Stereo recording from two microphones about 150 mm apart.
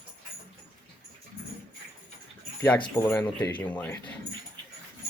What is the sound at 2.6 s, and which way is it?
Speech, 10° left (ahead or behind).